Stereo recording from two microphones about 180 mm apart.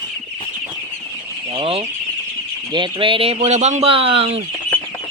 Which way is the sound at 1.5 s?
30° right (ahead or behind).